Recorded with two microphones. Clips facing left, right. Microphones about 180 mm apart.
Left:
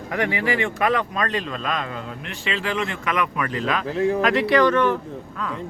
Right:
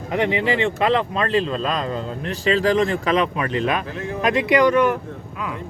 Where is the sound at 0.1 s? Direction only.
20° right (ahead or behind).